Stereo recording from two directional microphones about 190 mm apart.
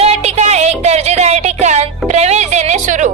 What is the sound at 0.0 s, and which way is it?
Music, 35° right (ahead or behind).